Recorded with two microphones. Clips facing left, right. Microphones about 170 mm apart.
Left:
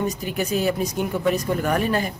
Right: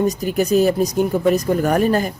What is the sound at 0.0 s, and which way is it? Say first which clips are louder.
Speech: right 7 dB; 40° right (ahead or behind).